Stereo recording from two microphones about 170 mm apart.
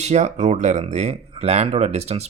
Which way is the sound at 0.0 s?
40° right (ahead or behind).